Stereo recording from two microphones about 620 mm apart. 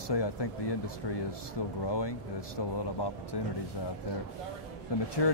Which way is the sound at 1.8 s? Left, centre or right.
Left.